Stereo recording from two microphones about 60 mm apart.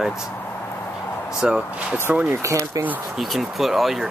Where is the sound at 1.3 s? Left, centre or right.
Centre.